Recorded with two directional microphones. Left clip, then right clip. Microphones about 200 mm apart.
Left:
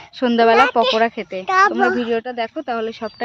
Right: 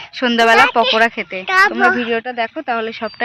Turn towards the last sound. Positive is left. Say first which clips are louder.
# right 3 dB
turn(degrees=5)  # may be behind; listen again after turning